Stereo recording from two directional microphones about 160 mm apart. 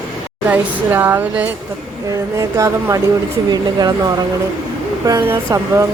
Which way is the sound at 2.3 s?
20° right (ahead or behind).